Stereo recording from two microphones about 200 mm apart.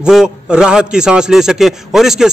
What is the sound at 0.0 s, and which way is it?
A man's voice, 5° right (ahead or behind).